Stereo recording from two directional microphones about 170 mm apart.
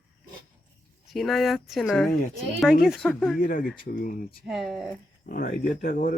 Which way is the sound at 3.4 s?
50° left (ahead or behind).